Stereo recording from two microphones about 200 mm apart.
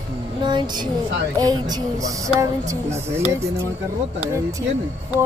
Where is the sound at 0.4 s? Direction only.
20° right (ahead or behind).